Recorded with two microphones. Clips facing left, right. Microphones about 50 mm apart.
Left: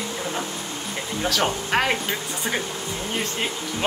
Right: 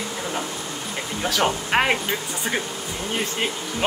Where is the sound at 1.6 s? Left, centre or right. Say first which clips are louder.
Right 2 dB; right.